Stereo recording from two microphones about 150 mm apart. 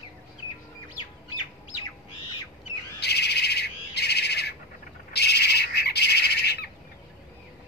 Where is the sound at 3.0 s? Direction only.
90° left.